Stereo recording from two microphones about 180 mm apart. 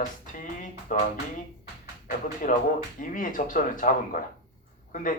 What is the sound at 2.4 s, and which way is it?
Speech, 45° left (ahead or behind).